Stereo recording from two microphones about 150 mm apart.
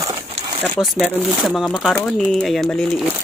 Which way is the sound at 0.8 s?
15° left (ahead or behind).